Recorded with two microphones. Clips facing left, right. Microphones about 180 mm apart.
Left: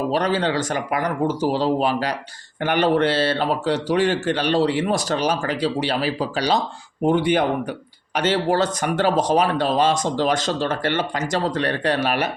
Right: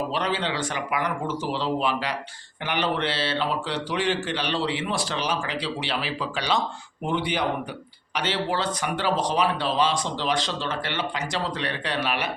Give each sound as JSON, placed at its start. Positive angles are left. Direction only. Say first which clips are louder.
{"t": 0.1, "sound": "speech", "louder": "left 6 dB", "side_deg": 40}